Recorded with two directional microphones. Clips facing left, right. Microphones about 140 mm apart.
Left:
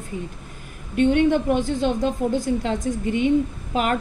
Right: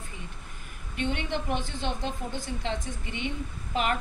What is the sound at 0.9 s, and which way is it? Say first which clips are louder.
A woman's voice: left 13 dB; 50° left (ahead or behind).